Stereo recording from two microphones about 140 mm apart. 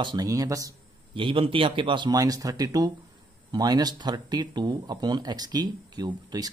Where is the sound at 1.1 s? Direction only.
35° right (ahead or behind).